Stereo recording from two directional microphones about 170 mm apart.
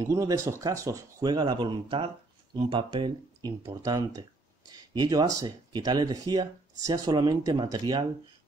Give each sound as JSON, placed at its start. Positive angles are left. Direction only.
{"t": 0.0, "sound": "speech", "side_deg": -20}